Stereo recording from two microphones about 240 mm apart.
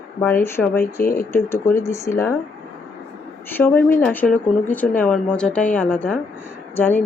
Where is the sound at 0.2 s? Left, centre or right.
Centre.